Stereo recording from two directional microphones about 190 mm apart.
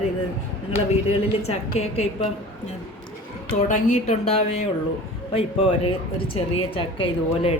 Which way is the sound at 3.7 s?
40° left (ahead or behind).